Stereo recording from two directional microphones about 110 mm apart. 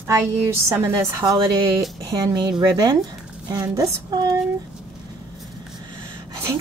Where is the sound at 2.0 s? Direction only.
40° right (ahead or behind).